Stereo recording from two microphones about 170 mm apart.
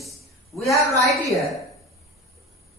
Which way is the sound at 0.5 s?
20° left (ahead or behind).